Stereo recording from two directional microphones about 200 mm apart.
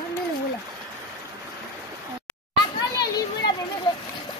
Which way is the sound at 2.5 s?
20° left (ahead or behind).